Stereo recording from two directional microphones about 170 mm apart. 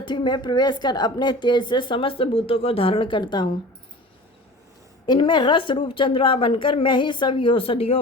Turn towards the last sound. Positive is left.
turn(degrees=35)  # may be behind; listen again after turning